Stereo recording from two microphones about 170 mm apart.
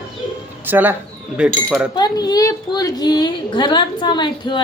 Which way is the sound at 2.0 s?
25° left (ahead or behind).